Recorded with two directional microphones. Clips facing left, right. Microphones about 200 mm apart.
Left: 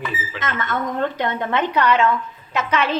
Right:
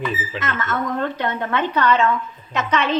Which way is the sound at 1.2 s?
15° left (ahead or behind).